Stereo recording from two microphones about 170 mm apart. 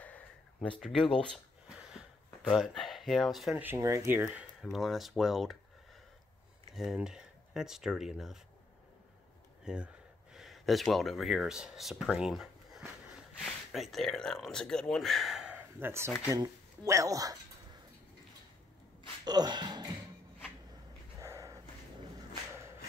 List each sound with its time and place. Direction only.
0.0 s speech: 10° left (ahead or behind)
6.7 s speech: centre (ahead or behind)
9.7 s speech: 5° right (ahead or behind); by 17.4 s 20° right (ahead or behind)
19.2 s speech: 25° right (ahead or behind)
21.2 s a sound: 15° right (ahead or behind)